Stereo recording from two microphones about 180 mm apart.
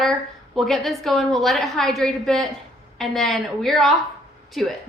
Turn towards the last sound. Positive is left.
turn(degrees=0)  # may be behind; listen again after turning